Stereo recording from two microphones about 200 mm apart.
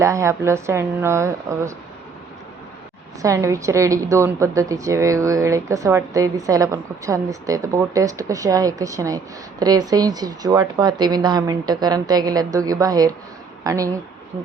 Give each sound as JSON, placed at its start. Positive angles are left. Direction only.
{"t": 0.0, "sound": "a woman's voice", "side_deg": -15}
{"t": 3.2, "sound": "a woman's voice", "side_deg": -15}